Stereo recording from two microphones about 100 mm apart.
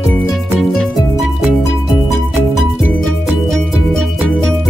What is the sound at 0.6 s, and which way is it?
Music, 5° left (ahead or behind).